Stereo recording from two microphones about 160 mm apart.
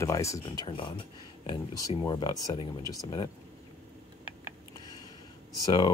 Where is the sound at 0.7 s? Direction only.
30° left (ahead or behind).